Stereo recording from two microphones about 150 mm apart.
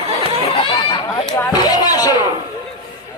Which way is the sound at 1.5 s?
25° left (ahead or behind).